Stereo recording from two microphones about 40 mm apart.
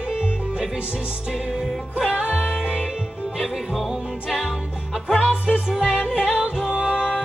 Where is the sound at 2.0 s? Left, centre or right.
Centre.